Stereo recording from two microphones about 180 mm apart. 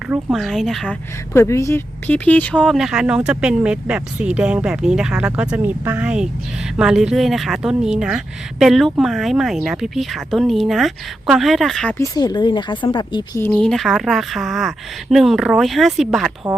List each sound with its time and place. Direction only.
0.1 s speech: centre (ahead or behind)
1.3 s speech: 15° left (ahead or behind)
11.9 s speech: 20° left (ahead or behind)
13.4 s speech: 10° left (ahead or behind)